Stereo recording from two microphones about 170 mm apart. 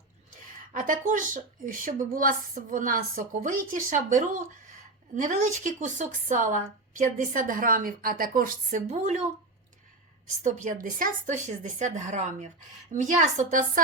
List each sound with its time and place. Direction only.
0.7 s a woman's voice: 50° right (ahead or behind)
8.9 s speech: 40° right (ahead or behind)
10.4 s speech: 45° right (ahead or behind)